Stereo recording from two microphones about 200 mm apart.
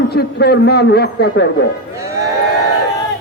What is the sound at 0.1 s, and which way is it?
A man's voice, 55° left (ahead or behind).